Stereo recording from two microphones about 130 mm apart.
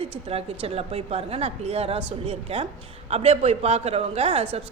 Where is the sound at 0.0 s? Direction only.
50° right (ahead or behind).